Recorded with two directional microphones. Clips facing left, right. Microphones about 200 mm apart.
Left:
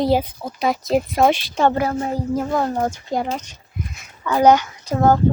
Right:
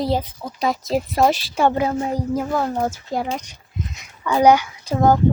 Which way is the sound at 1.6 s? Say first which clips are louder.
Even; 15° right (ahead or behind).